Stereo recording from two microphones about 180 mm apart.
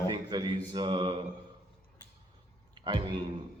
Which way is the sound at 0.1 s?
25° right (ahead or behind).